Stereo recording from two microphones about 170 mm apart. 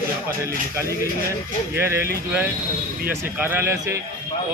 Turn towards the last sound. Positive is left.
turn(degrees=-15)  # may be behind; listen again after turning